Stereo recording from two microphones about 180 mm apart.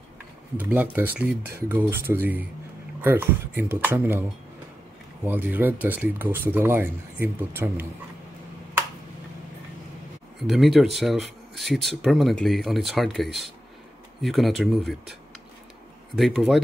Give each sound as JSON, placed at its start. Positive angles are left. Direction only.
{"t": 0.6, "sound": "speech", "side_deg": -10}
{"t": 10.4, "sound": "speech", "side_deg": 0}
{"t": 16.2, "sound": "speech", "side_deg": 0}